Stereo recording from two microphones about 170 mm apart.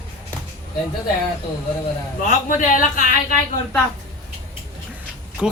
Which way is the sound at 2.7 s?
55° left (ahead or behind).